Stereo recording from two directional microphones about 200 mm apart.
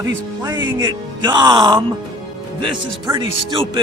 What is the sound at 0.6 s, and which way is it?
A man's voice, 20° right (ahead or behind).